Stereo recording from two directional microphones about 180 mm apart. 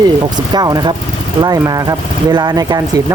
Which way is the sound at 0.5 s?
20° right (ahead or behind).